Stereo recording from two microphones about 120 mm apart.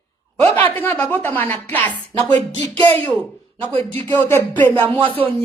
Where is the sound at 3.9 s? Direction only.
15° left (ahead or behind).